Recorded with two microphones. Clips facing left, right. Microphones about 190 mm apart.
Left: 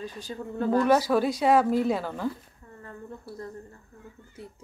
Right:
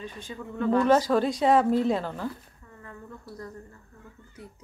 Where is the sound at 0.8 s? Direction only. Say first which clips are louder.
Right 1 dB; 10° left (ahead or behind).